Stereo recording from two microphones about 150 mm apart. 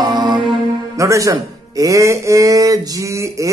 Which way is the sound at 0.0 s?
30° right (ahead or behind).